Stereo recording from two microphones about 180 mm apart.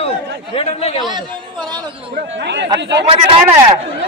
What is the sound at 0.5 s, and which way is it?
Speech, 35° left (ahead or behind).